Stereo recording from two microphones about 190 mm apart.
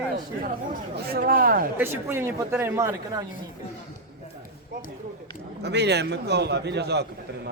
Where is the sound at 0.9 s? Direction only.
50° right (ahead or behind).